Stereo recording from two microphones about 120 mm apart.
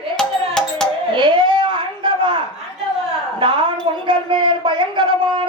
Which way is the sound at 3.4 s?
40° right (ahead or behind).